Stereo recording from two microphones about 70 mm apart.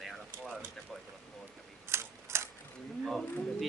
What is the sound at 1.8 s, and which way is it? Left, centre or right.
Camera, right.